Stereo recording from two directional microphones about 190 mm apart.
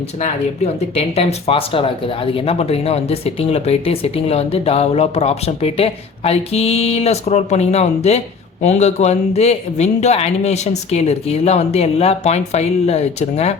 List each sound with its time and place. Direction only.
0.2 s speech: 35° left (ahead or behind)